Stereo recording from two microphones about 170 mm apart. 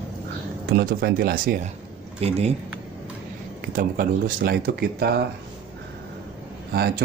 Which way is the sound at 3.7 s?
55° right (ahead or behind).